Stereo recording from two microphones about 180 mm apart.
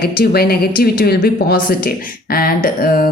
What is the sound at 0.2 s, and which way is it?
A woman's voice, 60° left (ahead or behind).